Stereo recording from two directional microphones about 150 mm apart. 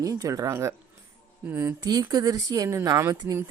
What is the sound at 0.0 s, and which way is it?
Speech, 25° right (ahead or behind).